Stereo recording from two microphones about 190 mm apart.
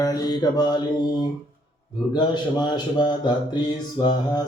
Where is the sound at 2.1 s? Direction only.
25° left (ahead or behind).